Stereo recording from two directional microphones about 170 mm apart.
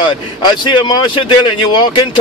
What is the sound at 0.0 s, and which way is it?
Speech, 25° left (ahead or behind).